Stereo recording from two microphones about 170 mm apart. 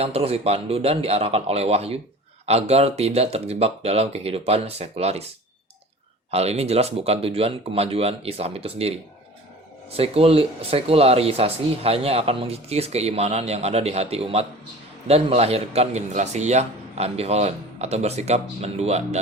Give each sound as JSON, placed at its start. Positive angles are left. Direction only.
{"t": 0.0, "sound": "speech", "side_deg": -35}
{"t": 6.3, "sound": "speech", "side_deg": -40}
{"t": 9.9, "sound": "speech", "side_deg": -35}